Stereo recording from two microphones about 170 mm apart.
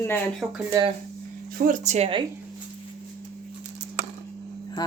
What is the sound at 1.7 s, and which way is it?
Speech, 40° right (ahead or behind).